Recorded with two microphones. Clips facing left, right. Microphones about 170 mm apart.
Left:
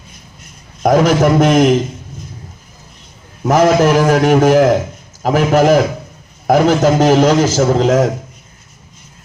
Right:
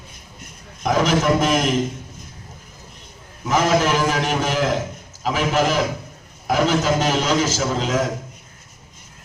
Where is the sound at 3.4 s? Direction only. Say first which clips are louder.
Left 8 dB; 50° left (ahead or behind).